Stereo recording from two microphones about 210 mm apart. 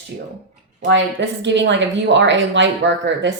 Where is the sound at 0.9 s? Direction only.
60° right (ahead or behind).